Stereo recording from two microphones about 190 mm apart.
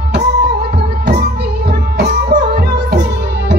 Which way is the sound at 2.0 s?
60° right (ahead or behind).